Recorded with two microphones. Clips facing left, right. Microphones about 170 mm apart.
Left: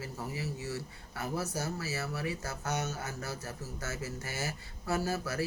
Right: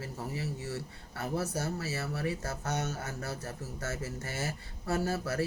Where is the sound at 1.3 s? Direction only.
55° right (ahead or behind).